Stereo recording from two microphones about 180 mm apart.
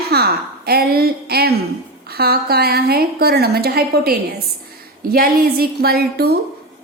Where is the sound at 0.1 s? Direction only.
60° right (ahead or behind).